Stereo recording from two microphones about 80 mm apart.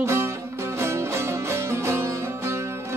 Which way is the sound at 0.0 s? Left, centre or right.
Right.